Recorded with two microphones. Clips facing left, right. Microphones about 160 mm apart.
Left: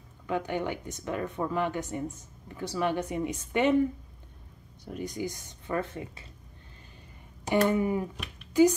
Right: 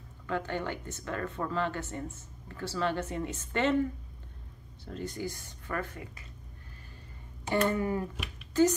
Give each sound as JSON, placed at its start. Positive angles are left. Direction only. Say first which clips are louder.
{"t": 0.3, "sound": "speech", "louder": "left 3 dB", "side_deg": 15}
{"t": 4.8, "sound": "speech", "louder": "left 2 dB", "side_deg": 15}
{"t": 7.4, "sound": "a woman's voice", "louder": "left 3 dB", "side_deg": 15}